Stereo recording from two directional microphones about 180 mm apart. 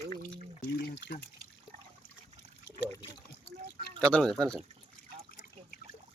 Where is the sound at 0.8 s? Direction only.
60° left (ahead or behind).